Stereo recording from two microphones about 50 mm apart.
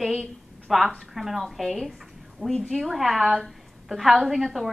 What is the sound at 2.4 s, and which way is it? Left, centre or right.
Speech, right.